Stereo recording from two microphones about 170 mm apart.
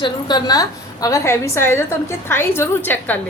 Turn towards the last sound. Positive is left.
turn(degrees=10)  # may be behind; listen again after turning